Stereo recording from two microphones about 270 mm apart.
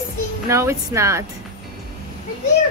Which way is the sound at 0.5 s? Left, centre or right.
Centre.